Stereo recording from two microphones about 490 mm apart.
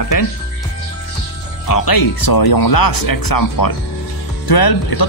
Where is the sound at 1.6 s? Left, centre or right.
Left.